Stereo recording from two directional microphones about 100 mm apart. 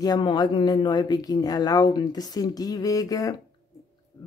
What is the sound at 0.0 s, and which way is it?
Speech, 45° left (ahead or behind).